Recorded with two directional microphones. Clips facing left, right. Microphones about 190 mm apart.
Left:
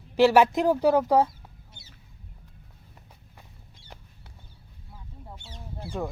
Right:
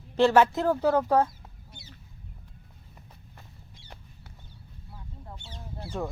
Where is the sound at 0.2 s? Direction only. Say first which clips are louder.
Left 2 dB; 10° left (ahead or behind).